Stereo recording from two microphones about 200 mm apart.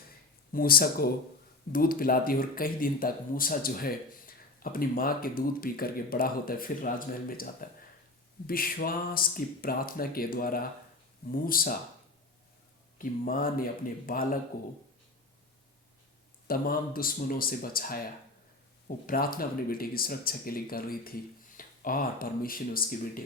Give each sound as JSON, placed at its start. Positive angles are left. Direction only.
{"t": 0.5, "sound": "speech", "side_deg": 45}
{"t": 13.0, "sound": "speech", "side_deg": 45}
{"t": 16.5, "sound": "speech", "side_deg": 45}
{"t": 19.0, "sound": "speech", "side_deg": 45}